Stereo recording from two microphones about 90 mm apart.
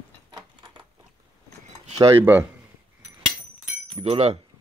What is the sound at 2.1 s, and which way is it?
Speech, 25° right (ahead or behind).